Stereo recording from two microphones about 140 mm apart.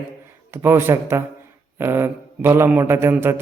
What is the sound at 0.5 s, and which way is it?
A man's voice, 15° right (ahead or behind).